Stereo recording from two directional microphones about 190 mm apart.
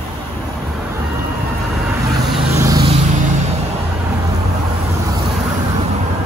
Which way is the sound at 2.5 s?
20° right (ahead or behind).